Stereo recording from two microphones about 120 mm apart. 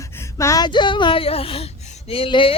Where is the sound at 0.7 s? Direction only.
40° left (ahead or behind).